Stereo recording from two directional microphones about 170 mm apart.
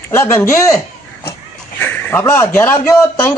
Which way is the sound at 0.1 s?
15° left (ahead or behind).